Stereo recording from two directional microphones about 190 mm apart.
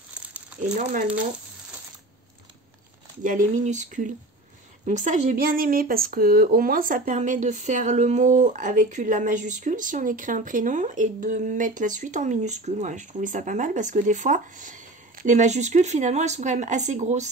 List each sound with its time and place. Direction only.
0.2 s crumpling: 5° right (ahead or behind)
0.6 s speech: 45° right (ahead or behind)
3.2 s speech: 40° right (ahead or behind)